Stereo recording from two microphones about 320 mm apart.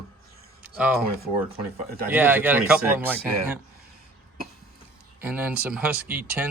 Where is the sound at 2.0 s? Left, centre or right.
Centre.